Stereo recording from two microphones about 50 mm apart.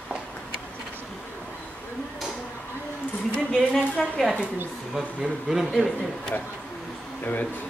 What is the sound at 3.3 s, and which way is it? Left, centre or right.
Speech, centre.